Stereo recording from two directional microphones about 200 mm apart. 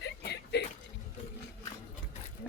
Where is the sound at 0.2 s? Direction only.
55° left (ahead or behind).